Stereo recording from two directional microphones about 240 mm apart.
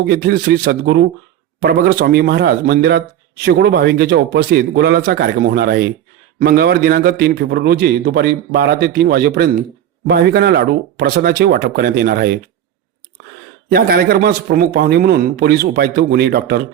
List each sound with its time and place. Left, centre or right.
0.1 s a man's voice: right
13.7 s a man's voice: right